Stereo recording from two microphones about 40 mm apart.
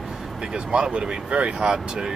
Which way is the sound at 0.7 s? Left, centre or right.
Right.